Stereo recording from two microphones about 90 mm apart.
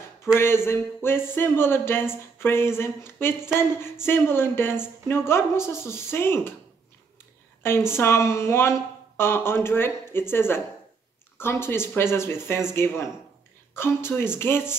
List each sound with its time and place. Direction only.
0.4 s speech: 25° left (ahead or behind)
7.6 s speech: 25° left (ahead or behind)